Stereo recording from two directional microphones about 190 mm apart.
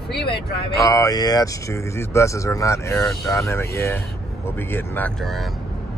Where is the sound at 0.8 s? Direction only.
20° left (ahead or behind); by 5.5 s centre (ahead or behind).